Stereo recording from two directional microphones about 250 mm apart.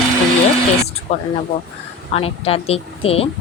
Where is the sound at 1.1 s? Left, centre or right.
Left.